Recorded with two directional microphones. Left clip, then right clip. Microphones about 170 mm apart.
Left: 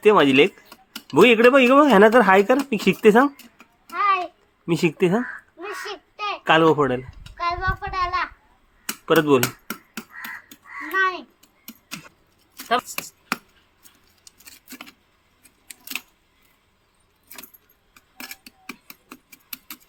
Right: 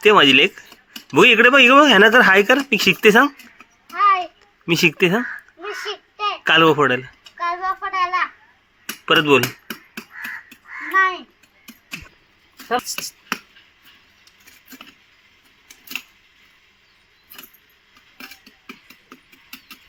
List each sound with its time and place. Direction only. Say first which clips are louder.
0.0 s speech: right 3 dB; centre (ahead or behind)
3.9 s babbling: right 4 dB; 40° left (ahead or behind)
4.2 s babbling: right 2 dB; 5° left (ahead or behind)
6.1 s babbling: right 4 dB; 45° left (ahead or behind)
6.4 s speech: right 3 dB; 5° left (ahead or behind)
7.5 s child singing: right 3 dB; 40° left (ahead or behind)
8.9 s speech: right 3 dB; 5° left (ahead or behind)